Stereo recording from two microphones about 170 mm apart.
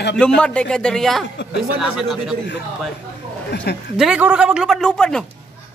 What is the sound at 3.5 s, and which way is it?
Speech, 75° left (ahead or behind).